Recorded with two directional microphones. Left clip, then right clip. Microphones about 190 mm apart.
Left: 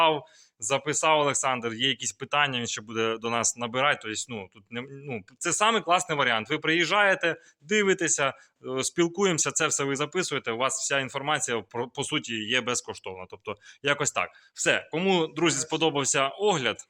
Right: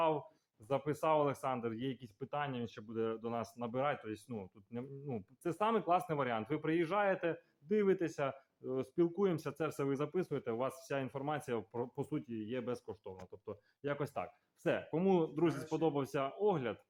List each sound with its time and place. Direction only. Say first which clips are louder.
0.7 s speech: left 10 dB; centre (ahead or behind)
9.6 s speech: left 10 dB; centre (ahead or behind); by 14.0 s 20° left (ahead or behind)
14.1 s speech: left 13 dB; 5° left (ahead or behind)